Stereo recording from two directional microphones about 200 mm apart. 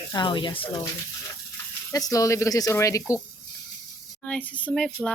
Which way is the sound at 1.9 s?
15° left (ahead or behind).